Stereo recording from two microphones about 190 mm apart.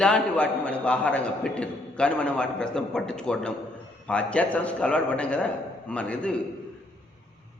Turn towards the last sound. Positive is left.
turn(degrees=5)  # may be behind; listen again after turning